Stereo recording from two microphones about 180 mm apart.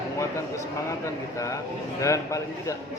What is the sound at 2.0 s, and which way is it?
Speech, 15° left (ahead or behind).